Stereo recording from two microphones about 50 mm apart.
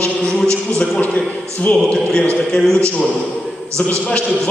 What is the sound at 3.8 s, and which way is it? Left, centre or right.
Speech, left.